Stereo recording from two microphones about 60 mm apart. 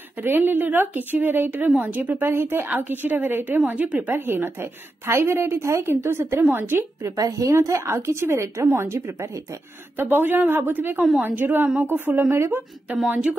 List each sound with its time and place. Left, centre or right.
0.2 s a woman's voice: right
4.1 s a woman's voice: right
7.0 s a woman's voice: right
7.7 s a woman's voice: right
9.9 s a woman's voice: right